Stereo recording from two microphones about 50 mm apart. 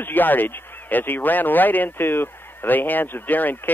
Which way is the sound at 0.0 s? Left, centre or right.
Left.